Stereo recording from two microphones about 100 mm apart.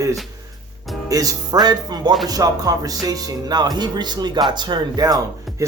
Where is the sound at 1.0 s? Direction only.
35° right (ahead or behind).